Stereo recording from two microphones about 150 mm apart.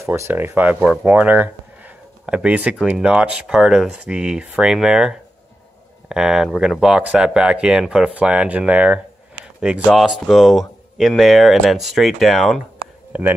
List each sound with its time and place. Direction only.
0.0 s speech: 15° right (ahead or behind); by 12.6 s centre (ahead or behind)